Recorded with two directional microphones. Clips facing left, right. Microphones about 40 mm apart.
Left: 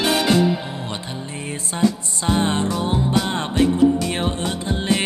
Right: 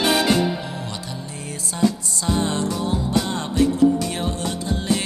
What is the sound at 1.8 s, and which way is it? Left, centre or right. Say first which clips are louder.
Music: left 1 dB; left.